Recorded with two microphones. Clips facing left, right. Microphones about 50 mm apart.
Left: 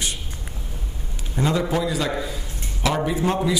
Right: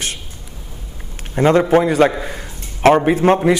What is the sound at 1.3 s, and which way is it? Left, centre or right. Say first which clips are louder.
A man's voice: right 10 dB; right.